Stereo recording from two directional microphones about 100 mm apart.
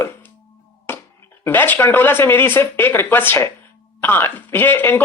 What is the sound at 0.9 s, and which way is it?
Music, 20° left (ahead or behind).